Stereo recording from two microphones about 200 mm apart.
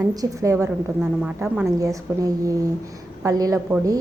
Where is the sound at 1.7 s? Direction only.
15° right (ahead or behind).